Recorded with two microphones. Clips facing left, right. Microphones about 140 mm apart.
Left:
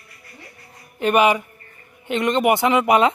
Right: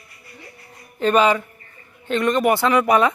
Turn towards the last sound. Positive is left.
turn(degrees=20)  # may be behind; listen again after turning